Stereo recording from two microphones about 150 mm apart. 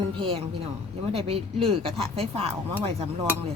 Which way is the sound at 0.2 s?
35° right (ahead or behind).